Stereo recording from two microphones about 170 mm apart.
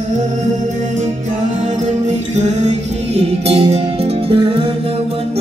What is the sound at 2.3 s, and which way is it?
Music, 40° right (ahead or behind).